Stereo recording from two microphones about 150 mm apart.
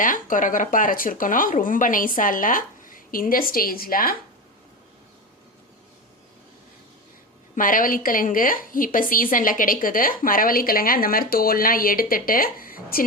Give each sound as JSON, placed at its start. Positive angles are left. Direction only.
{"t": 0.0, "sound": "speech", "side_deg": 65}
{"t": 7.5, "sound": "a woman's voice", "side_deg": 65}